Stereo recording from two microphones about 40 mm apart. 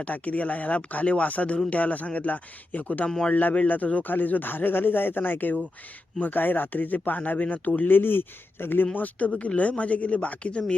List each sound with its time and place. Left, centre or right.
0.0 s speech: left
4.0 s speech: left
7.8 s speech: left
9.0 s speech: left